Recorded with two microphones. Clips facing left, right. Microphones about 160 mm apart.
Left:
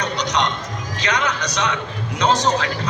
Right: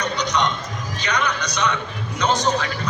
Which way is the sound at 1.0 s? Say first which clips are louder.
Left 2 dB; 90° left.